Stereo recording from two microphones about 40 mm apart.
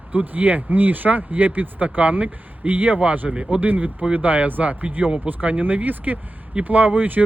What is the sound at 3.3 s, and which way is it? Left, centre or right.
Speech, right.